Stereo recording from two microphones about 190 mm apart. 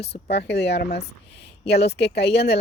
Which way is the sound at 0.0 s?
60° left (ahead or behind).